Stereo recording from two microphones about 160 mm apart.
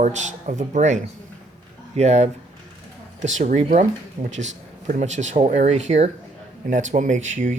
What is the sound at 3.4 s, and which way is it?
Speech, 50° right (ahead or behind).